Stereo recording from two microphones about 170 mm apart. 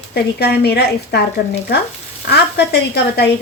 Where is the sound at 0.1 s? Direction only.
70° left (ahead or behind).